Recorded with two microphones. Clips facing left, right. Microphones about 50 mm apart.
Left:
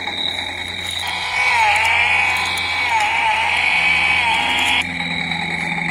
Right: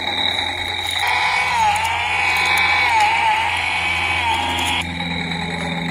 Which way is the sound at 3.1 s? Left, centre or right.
Centre.